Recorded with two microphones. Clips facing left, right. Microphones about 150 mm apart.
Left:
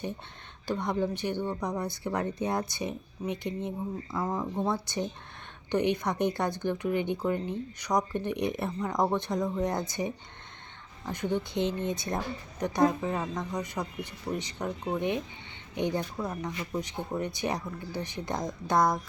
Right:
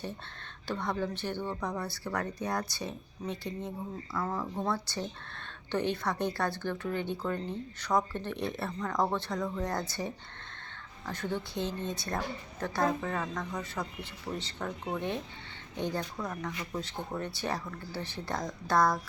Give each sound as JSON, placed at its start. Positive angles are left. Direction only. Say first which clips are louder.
{"t": 0.7, "sound": "speech", "louder": "left 4 dB", "side_deg": 15}